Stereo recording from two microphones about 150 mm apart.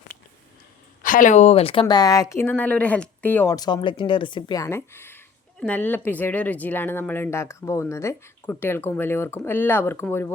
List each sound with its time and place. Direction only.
1.0 s speech: 60° left (ahead or behind); by 3.5 s 15° left (ahead or behind)
3.5 s speech: 30° left (ahead or behind)